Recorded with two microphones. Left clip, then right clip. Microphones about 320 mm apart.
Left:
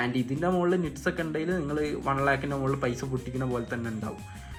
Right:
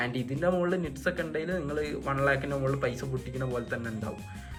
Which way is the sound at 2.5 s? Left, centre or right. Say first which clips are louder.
Left 1 dB; centre.